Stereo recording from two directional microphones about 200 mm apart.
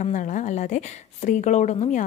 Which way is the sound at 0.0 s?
40° left (ahead or behind).